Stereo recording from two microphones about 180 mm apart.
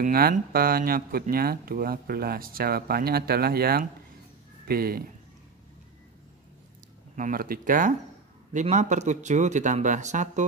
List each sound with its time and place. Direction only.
0.0 s speech: 55° right (ahead or behind)
7.2 s speech: 50° right (ahead or behind)